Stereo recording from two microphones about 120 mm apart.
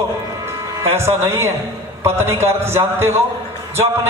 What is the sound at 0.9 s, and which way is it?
A man's voice, 20° right (ahead or behind).